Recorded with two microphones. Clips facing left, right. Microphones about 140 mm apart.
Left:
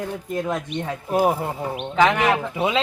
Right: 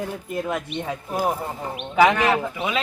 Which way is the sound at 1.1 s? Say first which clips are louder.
Left 5 dB; 20° left (ahead or behind).